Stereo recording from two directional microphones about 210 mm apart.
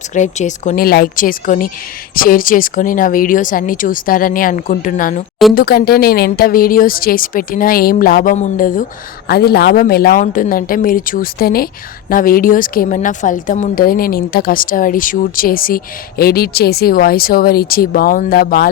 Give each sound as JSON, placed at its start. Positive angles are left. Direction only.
{"t": 0.1, "sound": "speech", "side_deg": 35}